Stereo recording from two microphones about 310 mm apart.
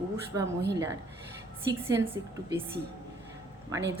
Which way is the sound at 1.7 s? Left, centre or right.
Centre.